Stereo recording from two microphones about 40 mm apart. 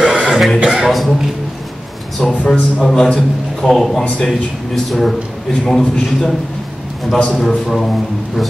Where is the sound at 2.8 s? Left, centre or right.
Centre.